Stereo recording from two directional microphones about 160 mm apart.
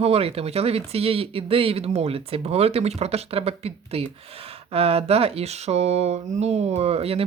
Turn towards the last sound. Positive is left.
turn(degrees=-40)  # may be behind; listen again after turning